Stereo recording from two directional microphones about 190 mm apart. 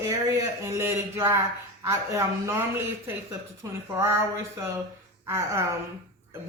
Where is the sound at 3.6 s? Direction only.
15° right (ahead or behind).